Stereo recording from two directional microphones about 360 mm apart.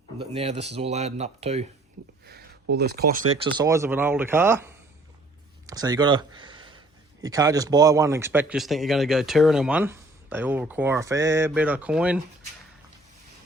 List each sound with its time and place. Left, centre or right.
0.3 s speech: centre
2.2 s a sound: right
3.4 s speech: centre